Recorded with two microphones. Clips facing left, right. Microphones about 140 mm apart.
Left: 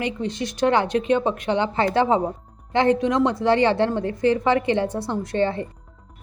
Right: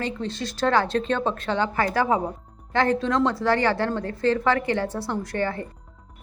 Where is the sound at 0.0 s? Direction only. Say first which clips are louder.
Left 3 dB; 15° left (ahead or behind).